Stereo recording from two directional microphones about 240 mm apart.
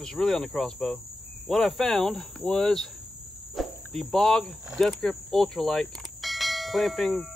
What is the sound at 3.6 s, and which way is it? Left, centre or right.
Speech, centre.